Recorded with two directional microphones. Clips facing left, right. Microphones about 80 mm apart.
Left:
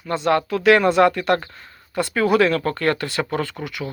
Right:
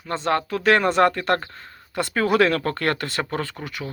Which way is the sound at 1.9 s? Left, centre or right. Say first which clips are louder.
Left 2 dB; right.